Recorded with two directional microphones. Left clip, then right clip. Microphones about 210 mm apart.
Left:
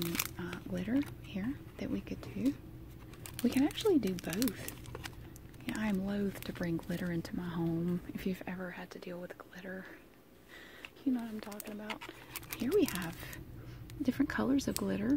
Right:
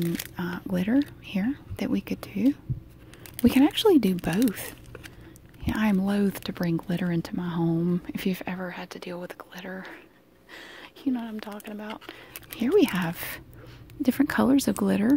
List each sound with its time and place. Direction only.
0.4 s single-lens reflex camera: 40° right (ahead or behind)
1.2 s speech: 45° right (ahead or behind)
3.4 s speech: 45° right (ahead or behind)
5.7 s speech: 45° right (ahead or behind)